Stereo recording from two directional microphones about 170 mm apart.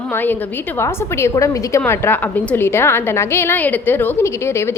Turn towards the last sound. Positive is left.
turn(degrees=15)  # may be behind; listen again after turning